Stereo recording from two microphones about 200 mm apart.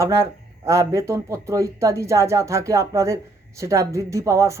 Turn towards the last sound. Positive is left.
turn(degrees=-15)  # may be behind; listen again after turning